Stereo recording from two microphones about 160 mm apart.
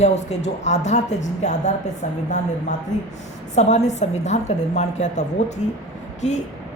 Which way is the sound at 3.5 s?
45° left (ahead or behind).